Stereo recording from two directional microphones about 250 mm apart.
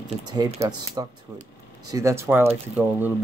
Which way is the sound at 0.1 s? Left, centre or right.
Right.